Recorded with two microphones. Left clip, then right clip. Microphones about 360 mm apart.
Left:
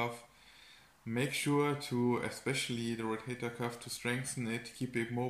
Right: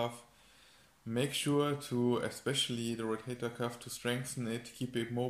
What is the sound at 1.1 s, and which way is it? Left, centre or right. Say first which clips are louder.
Speech: even; centre.